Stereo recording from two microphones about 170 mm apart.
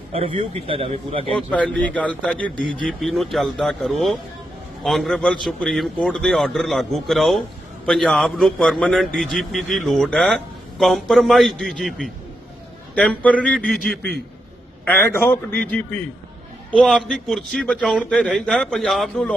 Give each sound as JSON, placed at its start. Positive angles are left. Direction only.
{"t": 0.1, "sound": "a man's voice", "side_deg": -35}
{"t": 1.4, "sound": "a man's voice", "side_deg": 5}
{"t": 14.8, "sound": "a man's voice", "side_deg": 10}